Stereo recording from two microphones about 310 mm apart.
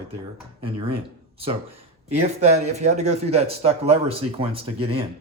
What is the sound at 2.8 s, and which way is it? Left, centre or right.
Speech, right.